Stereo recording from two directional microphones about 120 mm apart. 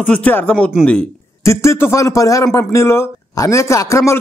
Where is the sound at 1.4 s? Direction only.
25° left (ahead or behind).